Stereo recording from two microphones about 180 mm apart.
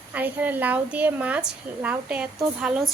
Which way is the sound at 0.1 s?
10° right (ahead or behind).